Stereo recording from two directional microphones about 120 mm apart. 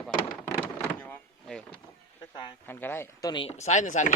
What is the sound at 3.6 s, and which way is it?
Speech, 85° left.